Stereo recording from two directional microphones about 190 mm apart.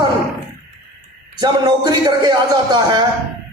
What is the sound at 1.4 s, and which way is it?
Speech, 20° right (ahead or behind).